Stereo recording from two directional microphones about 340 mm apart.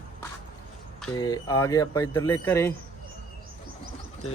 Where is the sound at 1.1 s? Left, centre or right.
Centre.